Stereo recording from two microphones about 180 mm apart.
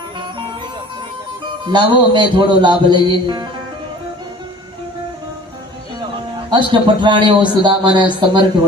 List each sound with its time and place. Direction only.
1.6 s a man's voice: 25° right (ahead or behind)
6.0 s a sound: 25° right (ahead or behind)
7.6 s a man's voice: 25° right (ahead or behind)